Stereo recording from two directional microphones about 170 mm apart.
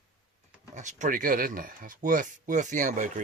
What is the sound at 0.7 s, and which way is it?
Speech, 45° right (ahead or behind).